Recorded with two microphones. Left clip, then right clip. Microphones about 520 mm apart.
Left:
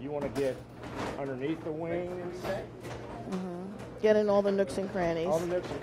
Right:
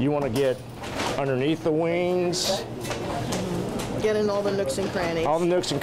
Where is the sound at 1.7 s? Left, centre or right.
Right.